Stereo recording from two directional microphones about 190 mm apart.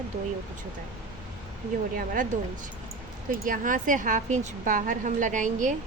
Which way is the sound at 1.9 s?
45° right (ahead or behind).